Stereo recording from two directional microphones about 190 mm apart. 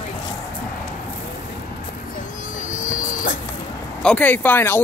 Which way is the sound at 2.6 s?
45° left (ahead or behind).